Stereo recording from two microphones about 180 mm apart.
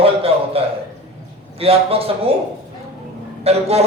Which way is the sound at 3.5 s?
35° right (ahead or behind).